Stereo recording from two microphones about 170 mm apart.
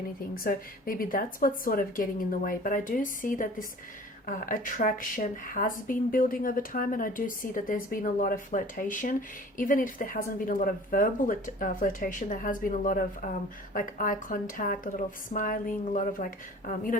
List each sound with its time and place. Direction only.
0.3 s a woman's voice: 55° left (ahead or behind)